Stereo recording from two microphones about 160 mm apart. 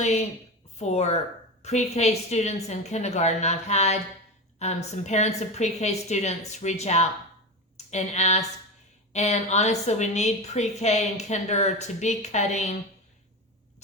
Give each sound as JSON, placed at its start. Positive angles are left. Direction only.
{"t": 0.0, "sound": "a woman's voice", "side_deg": 45}